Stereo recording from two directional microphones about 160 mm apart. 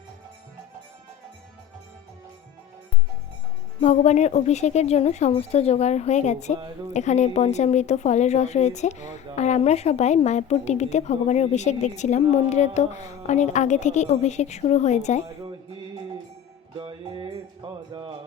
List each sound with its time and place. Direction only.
3.8 s speech: 45° left (ahead or behind)
16.7 s music: 30° right (ahead or behind)